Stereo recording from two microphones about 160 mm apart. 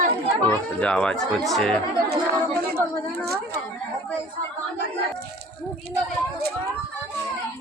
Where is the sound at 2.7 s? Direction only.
85° right.